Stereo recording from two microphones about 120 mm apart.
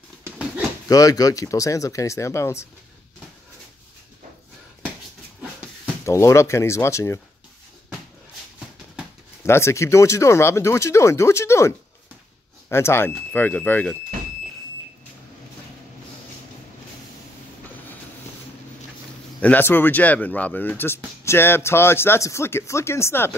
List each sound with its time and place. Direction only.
0.8 s speech: 30° left (ahead or behind)
6.0 s speech: 25° left (ahead or behind)
9.4 s speech: 20° left (ahead or behind)
19.4 s speech: 15° left (ahead or behind)